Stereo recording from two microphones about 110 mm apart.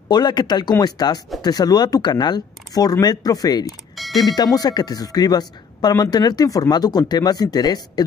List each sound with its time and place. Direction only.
0.1 s speech: 40° left (ahead or behind)
3.9 s mechanisms: centre (ahead or behind)
4.2 s speech: 35° left (ahead or behind)